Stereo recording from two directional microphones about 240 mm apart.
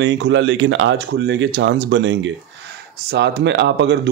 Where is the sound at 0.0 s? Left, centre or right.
Right.